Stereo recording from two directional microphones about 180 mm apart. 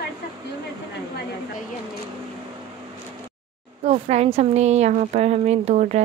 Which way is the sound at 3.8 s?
35° right (ahead or behind).